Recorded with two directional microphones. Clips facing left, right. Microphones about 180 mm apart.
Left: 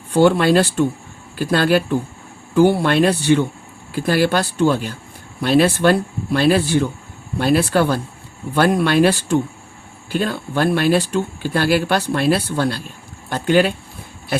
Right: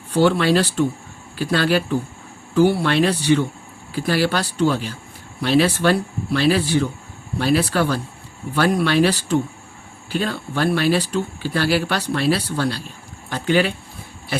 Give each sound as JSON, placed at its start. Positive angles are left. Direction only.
{"t": 0.1, "sound": "speech", "side_deg": 50}